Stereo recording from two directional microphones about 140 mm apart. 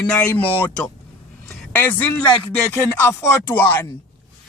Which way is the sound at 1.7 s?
10° left (ahead or behind).